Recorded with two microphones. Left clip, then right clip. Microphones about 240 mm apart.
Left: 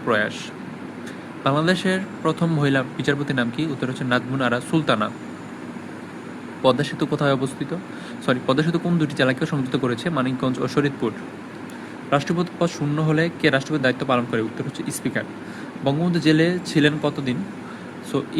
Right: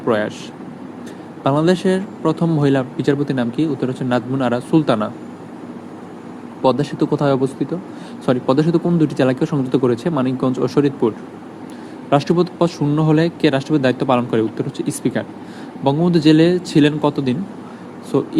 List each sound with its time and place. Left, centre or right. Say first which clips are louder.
0.0 s speech: right 3 dB; centre
1.5 s speech: right 4 dB; centre
6.6 s speech: right 3 dB; centre
12.1 s speech: right 6 dB; centre